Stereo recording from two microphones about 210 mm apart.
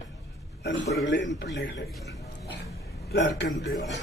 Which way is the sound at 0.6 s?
55° left (ahead or behind).